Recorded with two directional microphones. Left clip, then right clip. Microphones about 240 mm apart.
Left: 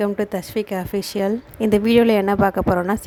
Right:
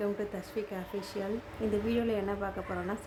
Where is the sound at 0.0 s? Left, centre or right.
Left.